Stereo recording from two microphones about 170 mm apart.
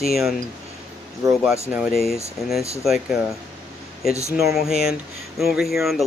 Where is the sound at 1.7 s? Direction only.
5° right (ahead or behind).